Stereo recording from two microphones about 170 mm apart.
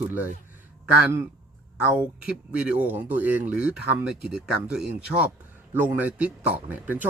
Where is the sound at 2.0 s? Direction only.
5° right (ahead or behind).